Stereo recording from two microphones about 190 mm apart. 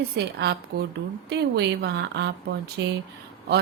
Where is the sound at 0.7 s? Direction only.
50° right (ahead or behind).